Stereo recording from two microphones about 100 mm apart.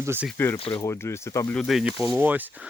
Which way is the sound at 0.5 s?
65° left (ahead or behind).